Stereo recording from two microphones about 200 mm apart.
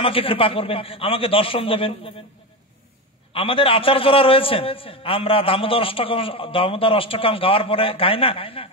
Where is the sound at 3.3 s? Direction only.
30° left (ahead or behind).